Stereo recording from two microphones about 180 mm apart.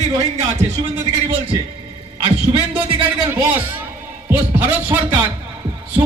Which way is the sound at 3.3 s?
10° right (ahead or behind).